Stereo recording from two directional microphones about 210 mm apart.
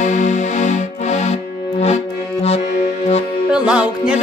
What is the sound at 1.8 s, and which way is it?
Accordion, 30° left (ahead or behind).